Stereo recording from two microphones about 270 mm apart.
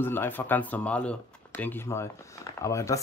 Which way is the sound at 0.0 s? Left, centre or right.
Centre.